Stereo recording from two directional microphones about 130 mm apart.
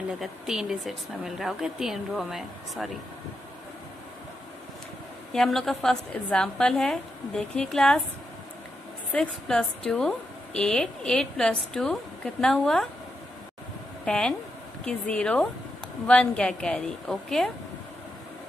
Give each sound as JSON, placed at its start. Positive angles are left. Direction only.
{"t": 0.2, "sound": "a woman's voice", "side_deg": -5}
{"t": 5.3, "sound": "a woman's voice", "side_deg": 5}
{"t": 9.1, "sound": "a woman's voice", "side_deg": 5}
{"t": 14.0, "sound": "a woman's voice", "side_deg": 5}